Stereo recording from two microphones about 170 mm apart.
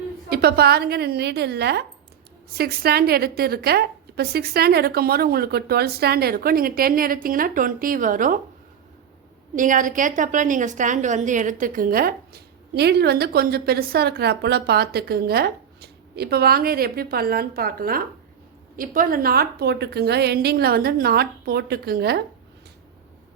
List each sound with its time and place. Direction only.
0.3 s a woman's voice: 65° right (ahead or behind)
9.6 s a woman's voice: 50° right (ahead or behind); by 22.2 s 65° right (ahead or behind)